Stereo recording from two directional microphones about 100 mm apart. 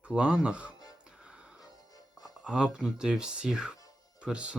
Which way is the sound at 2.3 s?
5° right (ahead or behind).